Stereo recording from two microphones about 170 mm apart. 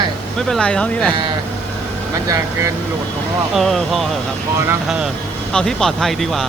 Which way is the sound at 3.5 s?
Centre (ahead or behind).